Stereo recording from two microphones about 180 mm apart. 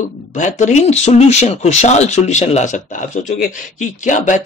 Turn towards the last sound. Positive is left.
turn(degrees=45)  # may be behind; listen again after turning